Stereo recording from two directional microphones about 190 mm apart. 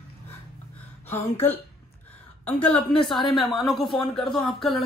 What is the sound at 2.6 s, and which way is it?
Speech, 25° left (ahead or behind).